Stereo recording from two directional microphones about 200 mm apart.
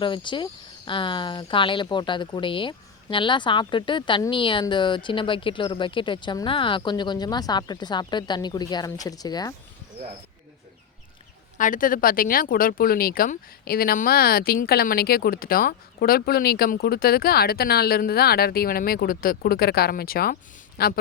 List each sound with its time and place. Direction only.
0.0 s speech: 25° left (ahead or behind)
11.5 s speech: 40° left (ahead or behind)